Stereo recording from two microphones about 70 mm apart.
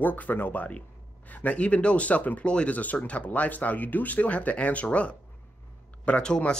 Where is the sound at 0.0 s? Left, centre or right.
Left.